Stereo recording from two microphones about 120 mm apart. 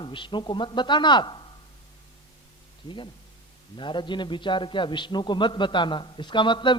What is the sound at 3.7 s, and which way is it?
A man's voice, 40° left (ahead or behind).